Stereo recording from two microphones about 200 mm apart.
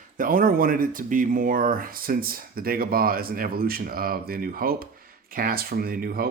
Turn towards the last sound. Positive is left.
turn(degrees=-50)  # may be behind; listen again after turning